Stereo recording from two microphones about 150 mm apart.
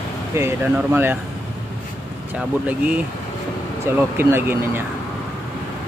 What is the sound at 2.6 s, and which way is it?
Speech, 10° right (ahead or behind).